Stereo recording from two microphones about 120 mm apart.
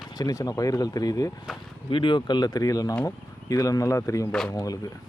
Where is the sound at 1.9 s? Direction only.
45° left (ahead or behind).